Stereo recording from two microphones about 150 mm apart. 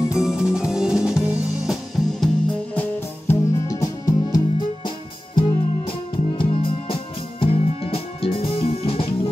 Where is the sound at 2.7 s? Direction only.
20° left (ahead or behind).